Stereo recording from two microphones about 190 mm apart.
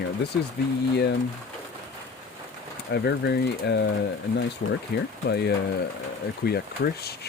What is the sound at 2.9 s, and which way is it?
Speech, 60° left (ahead or behind).